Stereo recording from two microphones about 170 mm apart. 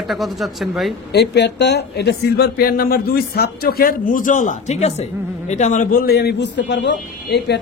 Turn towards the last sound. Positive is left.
turn(degrees=85)